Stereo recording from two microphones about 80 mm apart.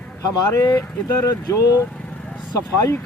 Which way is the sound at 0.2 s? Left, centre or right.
Left.